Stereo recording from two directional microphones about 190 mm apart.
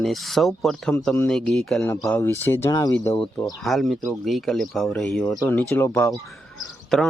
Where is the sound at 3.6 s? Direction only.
Centre (ahead or behind).